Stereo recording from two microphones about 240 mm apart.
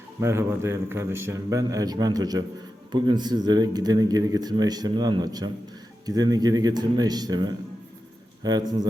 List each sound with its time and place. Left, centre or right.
0.2 s speech: centre